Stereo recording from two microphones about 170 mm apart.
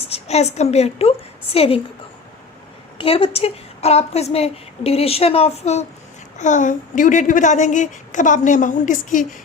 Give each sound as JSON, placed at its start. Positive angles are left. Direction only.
{"t": 0.1, "sound": "a woman's voice", "side_deg": 40}
{"t": 3.0, "sound": "a woman's voice", "side_deg": 35}